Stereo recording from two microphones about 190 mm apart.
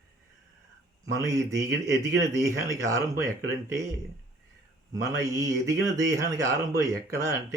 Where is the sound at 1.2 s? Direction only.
15° right (ahead or behind).